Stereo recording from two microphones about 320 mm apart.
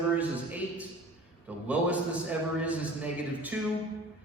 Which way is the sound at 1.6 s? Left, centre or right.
Centre.